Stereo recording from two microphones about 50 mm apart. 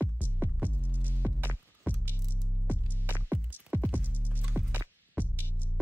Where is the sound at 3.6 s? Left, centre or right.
Right.